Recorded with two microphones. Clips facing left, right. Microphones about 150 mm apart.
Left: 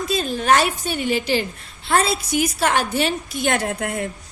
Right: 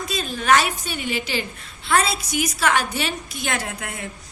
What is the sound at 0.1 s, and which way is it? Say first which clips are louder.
A woman's voice: left 1 dB; 45° left (ahead or behind).